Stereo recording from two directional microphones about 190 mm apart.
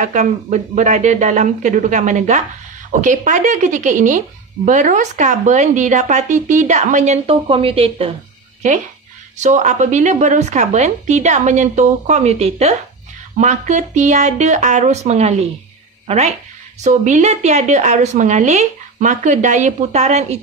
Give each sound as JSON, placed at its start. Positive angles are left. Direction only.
{"t": 0.0, "sound": "a woman's voice", "side_deg": -40}
{"t": 9.4, "sound": "a woman's voice", "side_deg": -40}
{"t": 16.8, "sound": "a woman's voice", "side_deg": -40}